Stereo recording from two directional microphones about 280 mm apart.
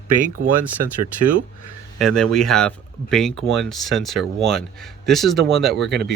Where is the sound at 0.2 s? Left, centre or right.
Right.